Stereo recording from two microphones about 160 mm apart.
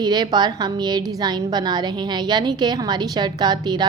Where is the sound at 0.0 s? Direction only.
25° right (ahead or behind).